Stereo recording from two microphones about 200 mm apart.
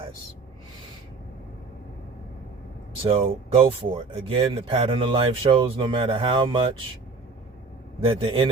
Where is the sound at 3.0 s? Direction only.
30° right (ahead or behind).